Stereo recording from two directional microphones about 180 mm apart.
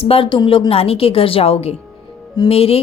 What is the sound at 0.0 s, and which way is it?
A woman's voice, 30° left (ahead or behind).